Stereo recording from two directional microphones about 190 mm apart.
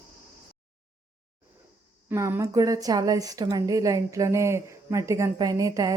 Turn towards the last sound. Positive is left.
turn(degrees=-20)  # may be behind; listen again after turning